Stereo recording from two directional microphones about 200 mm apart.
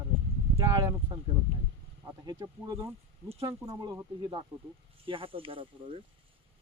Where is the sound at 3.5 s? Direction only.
15° right (ahead or behind).